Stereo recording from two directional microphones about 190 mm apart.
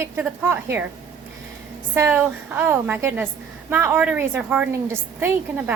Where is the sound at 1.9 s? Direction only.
10° right (ahead or behind).